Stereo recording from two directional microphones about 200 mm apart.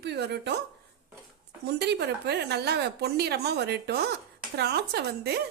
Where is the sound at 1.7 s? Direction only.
55° right (ahead or behind).